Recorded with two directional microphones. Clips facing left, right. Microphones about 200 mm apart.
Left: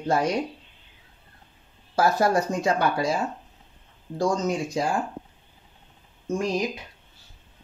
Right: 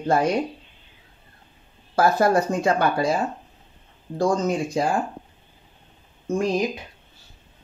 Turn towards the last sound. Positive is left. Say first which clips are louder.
# right 3 dB
turn(degrees=-55)  # may be behind; listen again after turning